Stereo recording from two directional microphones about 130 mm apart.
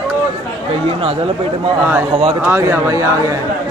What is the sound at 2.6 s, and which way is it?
Speech, 25° right (ahead or behind).